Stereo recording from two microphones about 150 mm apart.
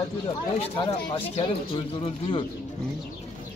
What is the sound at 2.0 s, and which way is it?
Speech, 35° left (ahead or behind).